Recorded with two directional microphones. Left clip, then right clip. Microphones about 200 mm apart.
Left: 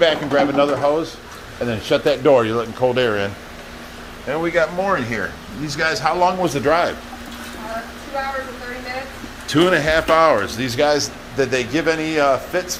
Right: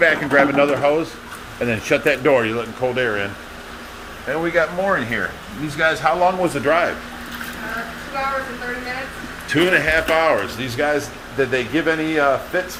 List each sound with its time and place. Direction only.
0.0 s a man's voice: 10° left (ahead or behind)
2.2 s a man's voice: 20° left (ahead or behind)
4.3 s a man's voice: 20° left (ahead or behind)
9.5 s speech: 30° left (ahead or behind)
11.3 s a man's voice: 15° left (ahead or behind)